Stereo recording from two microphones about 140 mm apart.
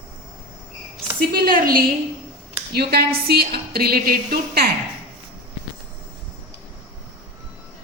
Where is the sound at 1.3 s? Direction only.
90° right.